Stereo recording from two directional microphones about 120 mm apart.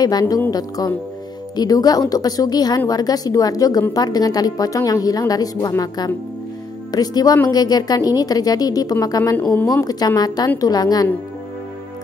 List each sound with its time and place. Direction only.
0.0 s a woman's voice: 30° left (ahead or behind)